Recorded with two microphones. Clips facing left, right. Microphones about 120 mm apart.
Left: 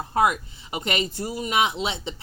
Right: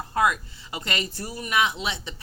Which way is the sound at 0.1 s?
25° left (ahead or behind).